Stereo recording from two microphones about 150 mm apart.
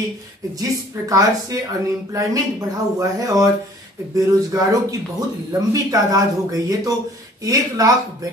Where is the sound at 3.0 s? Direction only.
20° right (ahead or behind).